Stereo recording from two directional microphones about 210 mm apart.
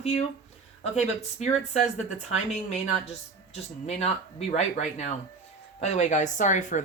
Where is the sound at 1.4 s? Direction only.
35° left (ahead or behind).